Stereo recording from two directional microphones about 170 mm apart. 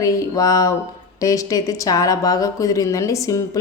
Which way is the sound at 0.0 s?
20° left (ahead or behind).